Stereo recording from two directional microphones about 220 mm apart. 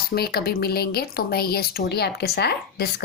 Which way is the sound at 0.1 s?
45° left (ahead or behind).